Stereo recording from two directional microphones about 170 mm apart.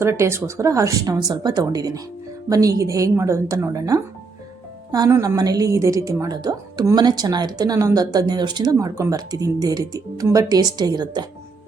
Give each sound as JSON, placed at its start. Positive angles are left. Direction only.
{"t": 0.0, "sound": "a woman's voice", "side_deg": -15}